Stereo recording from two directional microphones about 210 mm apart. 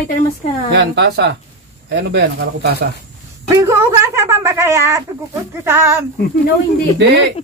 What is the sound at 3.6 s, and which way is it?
Speech, 15° right (ahead or behind).